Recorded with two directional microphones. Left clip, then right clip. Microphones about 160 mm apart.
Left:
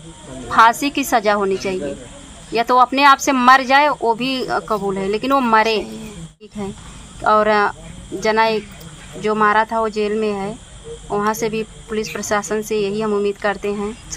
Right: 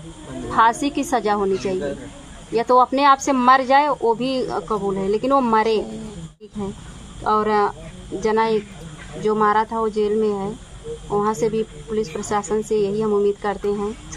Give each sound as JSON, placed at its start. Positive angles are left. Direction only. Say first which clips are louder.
{"t": 0.5, "sound": "a woman's voice", "louder": "left 4 dB", "side_deg": 35}
{"t": 7.2, "sound": "a woman's voice", "louder": "left 4 dB", "side_deg": 30}